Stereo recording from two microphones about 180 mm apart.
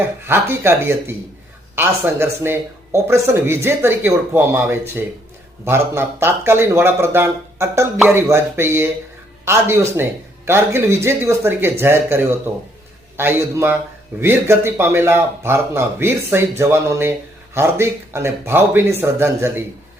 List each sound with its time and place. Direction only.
0.0 s speech: 15° right (ahead or behind)